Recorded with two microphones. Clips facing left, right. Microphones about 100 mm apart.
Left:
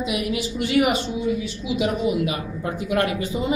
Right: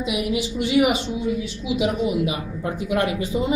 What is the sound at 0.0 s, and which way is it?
Speech, 15° right (ahead or behind).